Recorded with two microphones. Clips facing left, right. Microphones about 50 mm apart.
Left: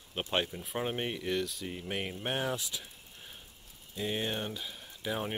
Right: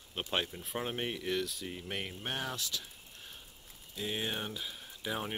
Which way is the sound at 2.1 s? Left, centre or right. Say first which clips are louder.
Left 5 dB; centre.